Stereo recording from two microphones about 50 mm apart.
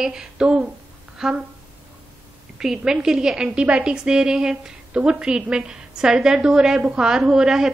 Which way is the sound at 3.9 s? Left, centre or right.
Centre.